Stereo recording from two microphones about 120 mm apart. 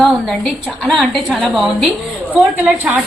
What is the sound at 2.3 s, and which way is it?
Speech, 10° right (ahead or behind).